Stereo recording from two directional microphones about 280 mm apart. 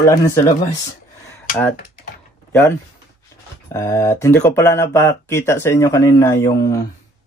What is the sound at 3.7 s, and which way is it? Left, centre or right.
Speech, centre.